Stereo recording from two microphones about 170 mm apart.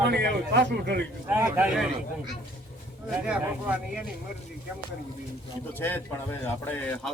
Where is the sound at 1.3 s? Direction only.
10° right (ahead or behind).